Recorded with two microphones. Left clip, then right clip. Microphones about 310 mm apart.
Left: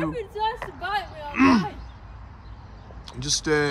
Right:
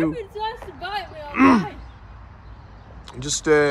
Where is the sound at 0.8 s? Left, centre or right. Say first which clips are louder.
Right 1 dB; centre.